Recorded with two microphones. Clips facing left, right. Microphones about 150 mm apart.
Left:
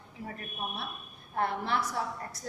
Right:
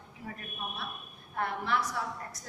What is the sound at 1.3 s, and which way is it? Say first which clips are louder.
Speech: left 1 dB; 30° left (ahead or behind).